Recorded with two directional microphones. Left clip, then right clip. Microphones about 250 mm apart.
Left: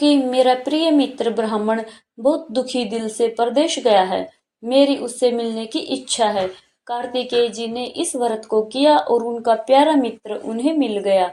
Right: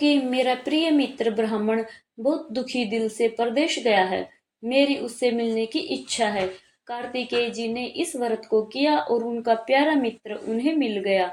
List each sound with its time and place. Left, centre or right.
0.3 s speech: centre